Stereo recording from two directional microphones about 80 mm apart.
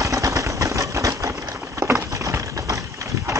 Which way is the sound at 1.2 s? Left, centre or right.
Right.